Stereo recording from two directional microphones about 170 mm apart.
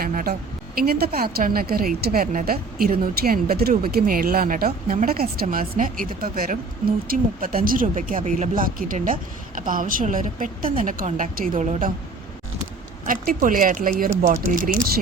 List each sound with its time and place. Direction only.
0.0 s a sound: 55° right (ahead or behind)
0.8 s a woman's voice: 65° right (ahead or behind); by 11.9 s 45° right (ahead or behind)
13.1 s a woman's voice: 55° right (ahead or behind)